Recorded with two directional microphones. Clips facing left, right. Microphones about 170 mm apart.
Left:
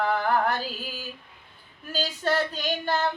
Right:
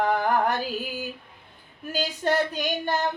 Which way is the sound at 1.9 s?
15° right (ahead or behind).